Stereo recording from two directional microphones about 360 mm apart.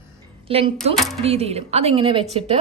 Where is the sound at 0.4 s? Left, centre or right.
Centre.